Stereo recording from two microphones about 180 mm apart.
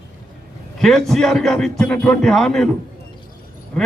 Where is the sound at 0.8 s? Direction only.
Centre (ahead or behind).